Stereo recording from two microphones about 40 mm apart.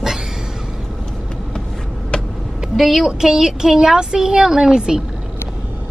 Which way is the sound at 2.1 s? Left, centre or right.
Left.